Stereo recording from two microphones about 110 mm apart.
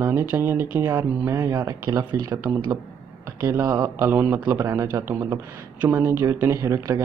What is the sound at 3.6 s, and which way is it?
Speech, 30° right (ahead or behind).